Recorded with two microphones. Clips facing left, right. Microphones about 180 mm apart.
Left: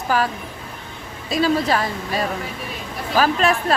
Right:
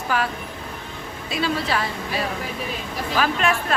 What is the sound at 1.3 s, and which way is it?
Speech, 40° left (ahead or behind).